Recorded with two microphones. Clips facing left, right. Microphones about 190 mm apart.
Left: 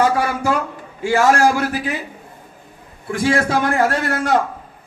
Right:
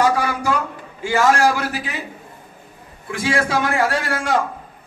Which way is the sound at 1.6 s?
50° left (ahead or behind).